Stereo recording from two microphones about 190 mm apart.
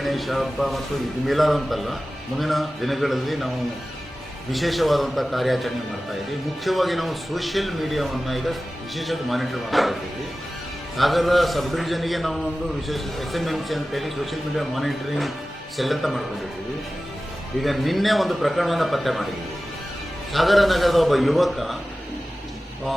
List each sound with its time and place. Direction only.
0.0 s a man's voice: centre (ahead or behind)
4.5 s a man's voice: centre (ahead or behind)
17.6 s a man's voice: centre (ahead or behind)
20.3 s a man's voice: centre (ahead or behind)